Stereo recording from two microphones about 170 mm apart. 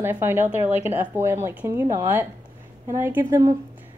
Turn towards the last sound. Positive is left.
turn(degrees=-15)  # may be behind; listen again after turning